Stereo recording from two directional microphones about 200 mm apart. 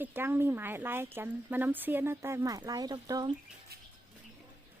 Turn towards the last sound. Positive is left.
turn(degrees=-20)  # may be behind; listen again after turning